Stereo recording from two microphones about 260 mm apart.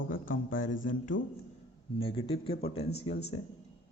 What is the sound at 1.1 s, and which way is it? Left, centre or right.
Speech, left.